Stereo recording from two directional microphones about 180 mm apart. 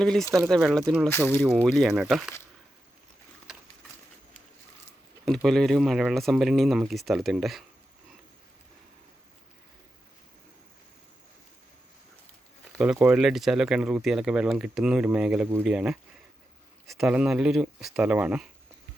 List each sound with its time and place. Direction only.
0.0 s speech: 5° left (ahead or behind)
1.4 s speech: 5° right (ahead or behind)
3.5 s a sound: 5° right (ahead or behind)
5.2 s speech: centre (ahead or behind)
12.8 s speech: 5° right (ahead or behind)